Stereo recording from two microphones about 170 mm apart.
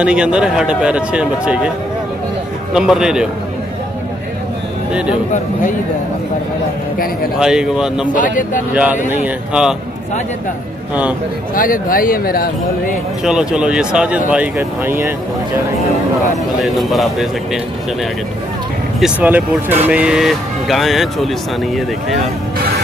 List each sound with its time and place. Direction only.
0.0 s speech: 5° right (ahead or behind)
2.7 s speech: 5° right (ahead or behind)
7.3 s speech: 5° right (ahead or behind)
8.1 s speech: 50° left (ahead or behind)
9.1 s speech: 5° right (ahead or behind)
11.5 s speech: 55° left (ahead or behind)
13.2 s speech: 5° right (ahead or behind)
16.6 s speech: centre (ahead or behind)
18.9 s speech: 5° right (ahead or behind)